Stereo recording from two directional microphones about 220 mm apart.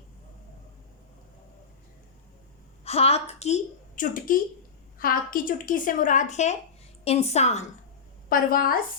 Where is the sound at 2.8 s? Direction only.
25° left (ahead or behind).